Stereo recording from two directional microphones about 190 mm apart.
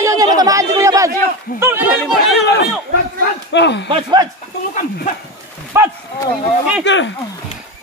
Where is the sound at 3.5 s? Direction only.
65° left (ahead or behind).